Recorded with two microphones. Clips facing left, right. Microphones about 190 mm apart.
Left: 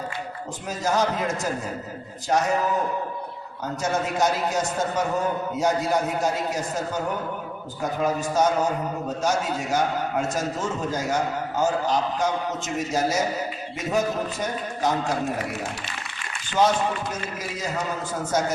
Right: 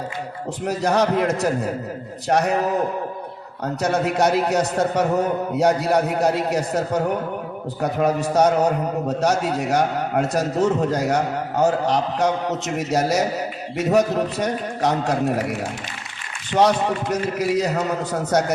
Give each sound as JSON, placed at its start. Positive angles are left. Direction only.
{"t": 0.6, "sound": "a man's voice", "side_deg": -65}
{"t": 3.8, "sound": "a man's voice", "side_deg": -65}
{"t": 16.5, "sound": "a man's voice", "side_deg": -65}